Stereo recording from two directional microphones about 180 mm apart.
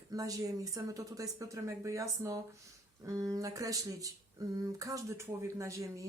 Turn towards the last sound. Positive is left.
turn(degrees=-15)  # may be behind; listen again after turning